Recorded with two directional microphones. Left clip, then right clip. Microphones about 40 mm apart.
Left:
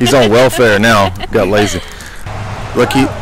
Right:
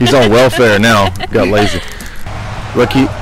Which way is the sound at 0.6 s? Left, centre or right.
Left.